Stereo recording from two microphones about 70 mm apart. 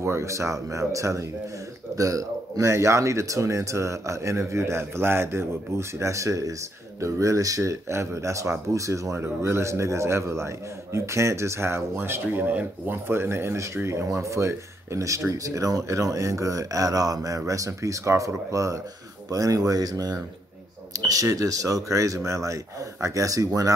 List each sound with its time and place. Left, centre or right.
0.0 s a man's voice: right